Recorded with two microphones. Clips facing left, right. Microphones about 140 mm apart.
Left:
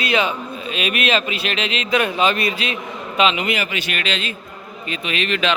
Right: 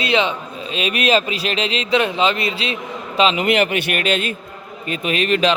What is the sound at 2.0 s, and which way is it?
A man's voice, 20° right (ahead or behind).